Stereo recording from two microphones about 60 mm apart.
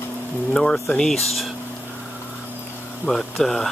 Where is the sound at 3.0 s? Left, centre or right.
Centre.